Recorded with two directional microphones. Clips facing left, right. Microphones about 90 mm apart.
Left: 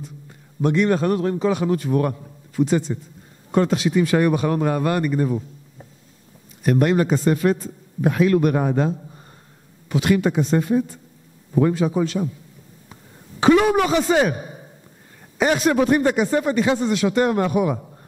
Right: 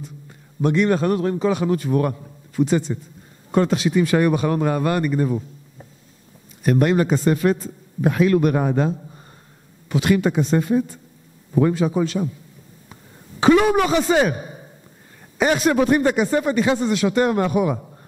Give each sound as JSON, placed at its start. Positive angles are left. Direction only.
{"t": 0.6, "sound": "a man's voice", "side_deg": -20}
{"t": 6.6, "sound": "a man's voice", "side_deg": -15}
{"t": 13.4, "sound": "speech", "side_deg": -15}